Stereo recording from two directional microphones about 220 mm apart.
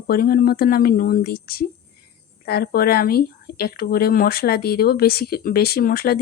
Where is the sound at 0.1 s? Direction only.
40° left (ahead or behind).